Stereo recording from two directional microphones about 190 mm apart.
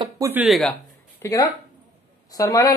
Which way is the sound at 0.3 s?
5° right (ahead or behind).